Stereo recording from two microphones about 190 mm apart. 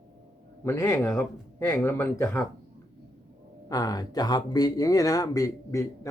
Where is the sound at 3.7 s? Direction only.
20° left (ahead or behind).